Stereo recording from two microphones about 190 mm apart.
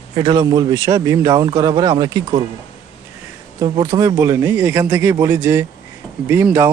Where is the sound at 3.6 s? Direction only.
20° right (ahead or behind).